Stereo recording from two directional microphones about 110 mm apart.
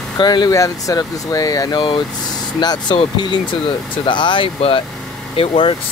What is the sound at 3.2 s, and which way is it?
Speech, 45° left (ahead or behind).